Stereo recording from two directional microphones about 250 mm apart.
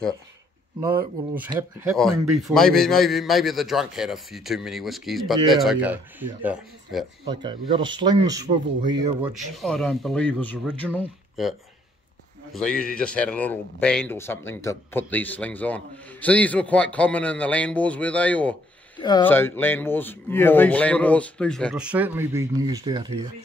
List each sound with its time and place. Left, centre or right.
0.7 s speech: centre
2.0 s speech: centre
7.2 s speech: centre
9.2 s speech: centre
12.9 s speech: centre
18.9 s speech: centre